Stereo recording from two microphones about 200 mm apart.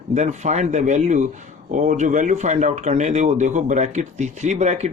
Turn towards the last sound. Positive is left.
turn(degrees=-35)  # may be behind; listen again after turning